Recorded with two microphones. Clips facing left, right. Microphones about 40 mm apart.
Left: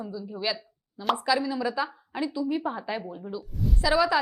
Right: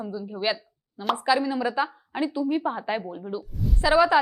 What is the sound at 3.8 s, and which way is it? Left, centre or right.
Speech, right.